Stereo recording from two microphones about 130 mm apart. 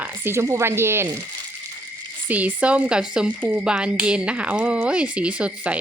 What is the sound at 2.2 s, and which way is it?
Speech, 10° right (ahead or behind).